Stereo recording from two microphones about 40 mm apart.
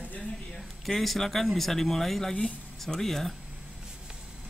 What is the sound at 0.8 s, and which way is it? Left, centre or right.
Speech, centre.